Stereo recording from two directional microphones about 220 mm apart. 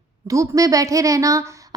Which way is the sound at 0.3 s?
15° right (ahead or behind).